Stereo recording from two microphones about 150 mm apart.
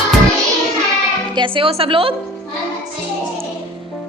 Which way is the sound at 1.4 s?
35° right (ahead or behind).